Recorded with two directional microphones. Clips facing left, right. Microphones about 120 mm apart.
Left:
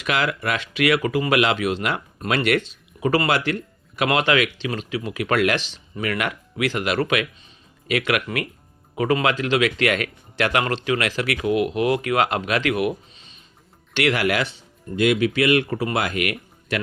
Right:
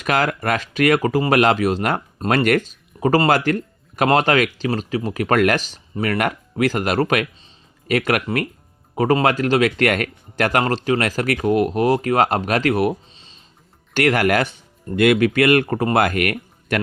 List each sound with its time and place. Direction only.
0.0 s speech: 45° right (ahead or behind)
13.9 s speech: 45° right (ahead or behind)